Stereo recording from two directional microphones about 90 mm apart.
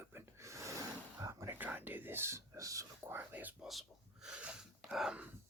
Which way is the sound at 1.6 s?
20° right (ahead or behind).